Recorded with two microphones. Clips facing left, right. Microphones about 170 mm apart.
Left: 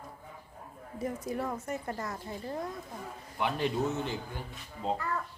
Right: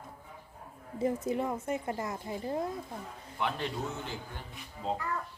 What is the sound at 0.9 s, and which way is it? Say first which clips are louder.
A woman's voice: right 4 dB; 25° right (ahead or behind).